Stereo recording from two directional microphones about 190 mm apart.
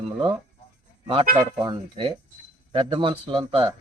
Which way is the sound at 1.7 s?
25° right (ahead or behind).